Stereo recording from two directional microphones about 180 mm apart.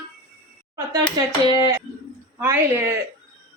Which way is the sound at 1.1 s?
20° right (ahead or behind).